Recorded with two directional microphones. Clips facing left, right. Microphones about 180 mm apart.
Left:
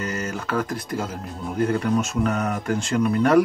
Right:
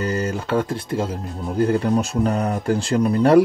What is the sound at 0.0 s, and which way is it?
Speech, 30° right (ahead or behind).